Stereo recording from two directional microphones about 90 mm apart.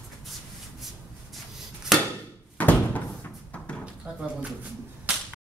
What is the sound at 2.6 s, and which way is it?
Door, 20° left (ahead or behind).